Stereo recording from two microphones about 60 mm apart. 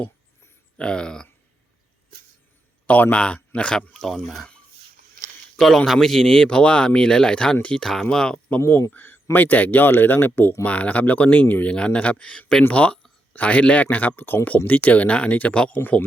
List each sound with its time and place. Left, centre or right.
0.8 s speech: centre
2.8 s speech: left; by 4.4 s centre
5.5 s speech: centre
8.9 s a sound: left
9.3 s speech: left
10.6 s speech: left
11.7 s speech: centre
14.2 s speech: left
15.8 s speech: left